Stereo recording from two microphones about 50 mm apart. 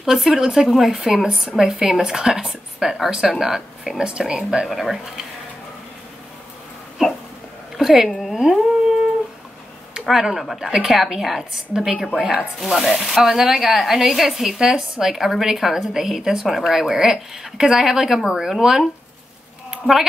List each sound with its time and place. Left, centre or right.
0.0 s a woman's voice: centre
4.6 s speech: centre
7.0 s a sound: centre
8.1 s dog: centre
10.0 s a woman's voice: centre